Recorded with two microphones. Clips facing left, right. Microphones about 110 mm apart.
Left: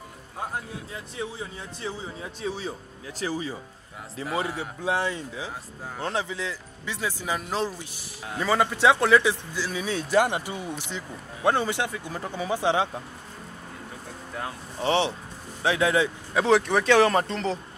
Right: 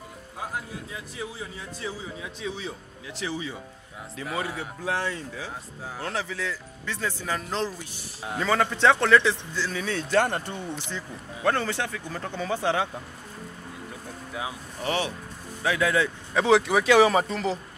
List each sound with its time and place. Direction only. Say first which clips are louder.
2.2 s speech: left 3 dB; 40° left (ahead or behind)
4.4 s speech: left 2 dB; 25° left (ahead or behind)
14.8 s speech: left 4 dB; 25° left (ahead or behind)
16.3 s speech: right 1 dB; centre (ahead or behind)